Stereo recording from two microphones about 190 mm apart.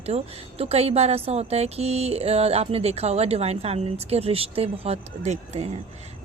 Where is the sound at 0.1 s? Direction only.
35° right (ahead or behind).